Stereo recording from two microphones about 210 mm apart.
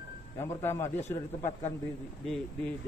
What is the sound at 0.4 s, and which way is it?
A man's voice, 10° left (ahead or behind).